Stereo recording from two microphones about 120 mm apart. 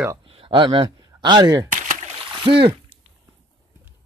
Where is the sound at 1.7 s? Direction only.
75° right (ahead or behind).